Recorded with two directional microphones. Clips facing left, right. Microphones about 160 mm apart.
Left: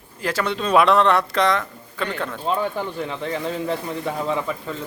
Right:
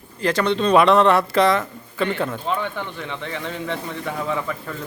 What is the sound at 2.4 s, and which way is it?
Speech, 35° left (ahead or behind).